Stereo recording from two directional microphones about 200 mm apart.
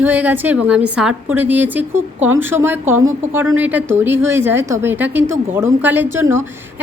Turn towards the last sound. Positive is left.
turn(degrees=-15)  # may be behind; listen again after turning